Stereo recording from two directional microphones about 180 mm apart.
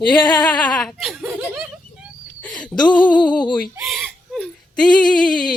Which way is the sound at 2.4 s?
5° left (ahead or behind).